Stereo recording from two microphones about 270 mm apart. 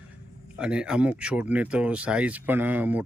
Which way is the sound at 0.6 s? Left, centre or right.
Centre.